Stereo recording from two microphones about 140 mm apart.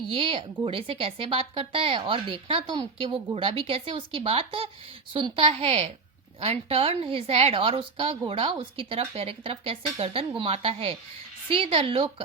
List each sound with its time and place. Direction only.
0.1 s a woman's voice: 40° right (ahead or behind)